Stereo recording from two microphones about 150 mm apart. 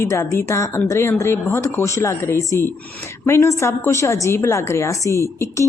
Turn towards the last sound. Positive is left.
turn(degrees=20)  # may be behind; listen again after turning